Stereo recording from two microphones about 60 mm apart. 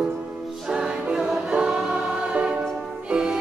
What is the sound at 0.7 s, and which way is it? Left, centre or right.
Music, centre.